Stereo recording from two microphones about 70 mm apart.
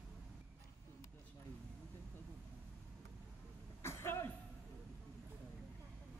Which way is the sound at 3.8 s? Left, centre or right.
Left.